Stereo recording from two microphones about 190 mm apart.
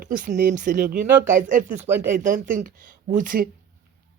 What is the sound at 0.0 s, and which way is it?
Speech, 45° right (ahead or behind).